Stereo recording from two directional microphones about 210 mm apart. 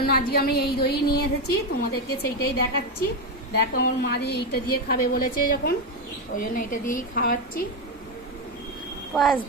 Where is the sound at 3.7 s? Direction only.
45° left (ahead or behind).